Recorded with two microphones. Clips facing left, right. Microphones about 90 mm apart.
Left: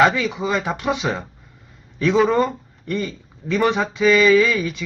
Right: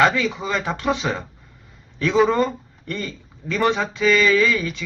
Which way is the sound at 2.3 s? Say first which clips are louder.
Left 2 dB; 10° left (ahead or behind).